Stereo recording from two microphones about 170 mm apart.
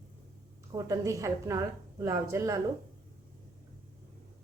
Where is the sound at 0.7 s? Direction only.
20° right (ahead or behind).